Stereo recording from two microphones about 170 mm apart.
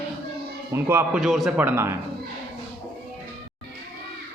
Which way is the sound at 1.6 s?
15° right (ahead or behind).